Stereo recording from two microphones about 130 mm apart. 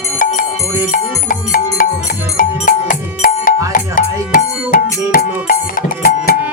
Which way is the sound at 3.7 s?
90° left.